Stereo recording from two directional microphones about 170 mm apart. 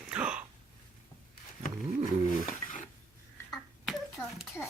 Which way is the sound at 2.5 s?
45° left (ahead or behind).